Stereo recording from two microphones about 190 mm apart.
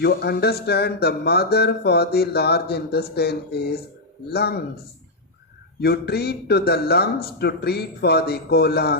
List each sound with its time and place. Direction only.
0.0 s speech: 60° left (ahead or behind)
5.8 s speech: 55° left (ahead or behind)